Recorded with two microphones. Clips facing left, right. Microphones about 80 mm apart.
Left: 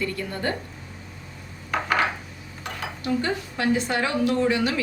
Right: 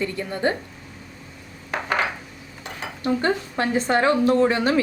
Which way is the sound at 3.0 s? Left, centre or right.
Right.